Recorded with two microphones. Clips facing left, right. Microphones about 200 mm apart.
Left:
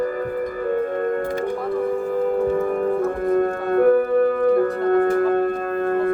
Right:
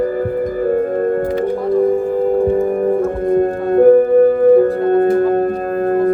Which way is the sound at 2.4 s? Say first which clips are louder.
Right 5 dB; 30° right (ahead or behind).